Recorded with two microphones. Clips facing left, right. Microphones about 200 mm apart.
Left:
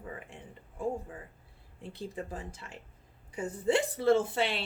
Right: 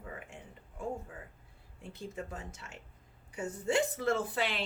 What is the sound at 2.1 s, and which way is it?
Speech, 30° left (ahead or behind).